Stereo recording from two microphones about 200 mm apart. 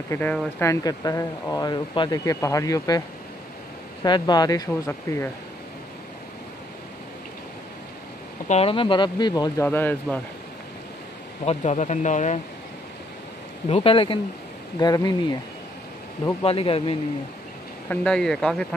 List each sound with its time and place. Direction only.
0.1 s speech: 5° left (ahead or behind)
0.7 s speech: 15° left (ahead or behind)
4.0 s speech: 20° left (ahead or behind)
8.5 s speech: 30° left (ahead or behind); by 10.2 s 10° left (ahead or behind)
11.4 s speech: 35° left (ahead or behind)
13.7 s speech: 30° left (ahead or behind)
16.4 s speech: 30° left (ahead or behind)
17.8 s speech: 5° left (ahead or behind)